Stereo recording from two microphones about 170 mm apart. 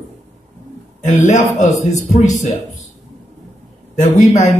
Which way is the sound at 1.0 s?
45° left (ahead or behind).